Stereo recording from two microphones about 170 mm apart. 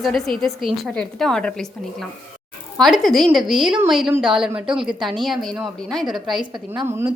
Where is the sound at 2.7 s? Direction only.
Centre (ahead or behind).